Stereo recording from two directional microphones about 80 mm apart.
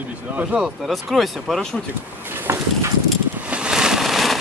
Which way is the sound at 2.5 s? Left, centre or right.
Right.